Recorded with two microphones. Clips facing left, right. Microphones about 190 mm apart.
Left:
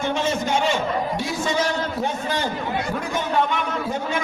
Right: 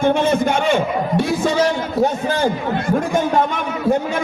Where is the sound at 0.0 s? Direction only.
55° right (ahead or behind).